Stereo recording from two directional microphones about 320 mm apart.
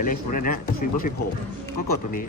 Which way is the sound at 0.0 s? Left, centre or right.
Left.